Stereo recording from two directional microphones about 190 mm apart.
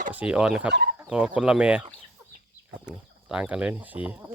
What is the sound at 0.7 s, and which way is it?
Speech, 55° right (ahead or behind).